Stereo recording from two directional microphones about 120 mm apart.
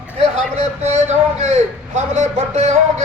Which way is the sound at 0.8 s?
70° right (ahead or behind).